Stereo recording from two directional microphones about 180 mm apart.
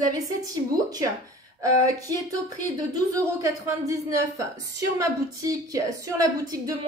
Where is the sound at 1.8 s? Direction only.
20° right (ahead or behind).